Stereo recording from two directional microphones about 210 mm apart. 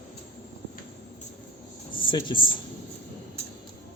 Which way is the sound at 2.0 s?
25° left (ahead or behind).